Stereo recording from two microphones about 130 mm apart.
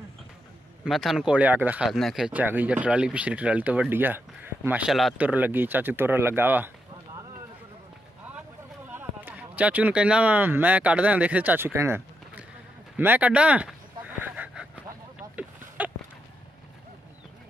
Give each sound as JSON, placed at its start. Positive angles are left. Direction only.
{"t": 0.8, "sound": "speech", "side_deg": 0}
{"t": 1.9, "sound": "speech", "side_deg": 0}
{"t": 8.9, "sound": "speech", "side_deg": -15}
{"t": 12.9, "sound": "a sound", "side_deg": -15}
{"t": 15.8, "sound": "horse", "side_deg": -10}